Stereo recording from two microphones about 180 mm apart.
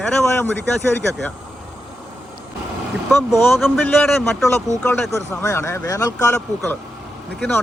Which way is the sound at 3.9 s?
10° left (ahead or behind).